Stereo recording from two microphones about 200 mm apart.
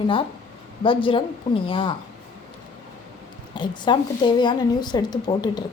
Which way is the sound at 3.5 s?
25° left (ahead or behind).